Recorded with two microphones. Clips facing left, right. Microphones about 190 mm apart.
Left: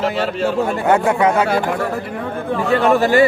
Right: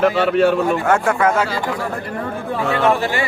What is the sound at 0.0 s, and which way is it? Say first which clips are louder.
Speech: right 4 dB; 60° right (ahead or behind).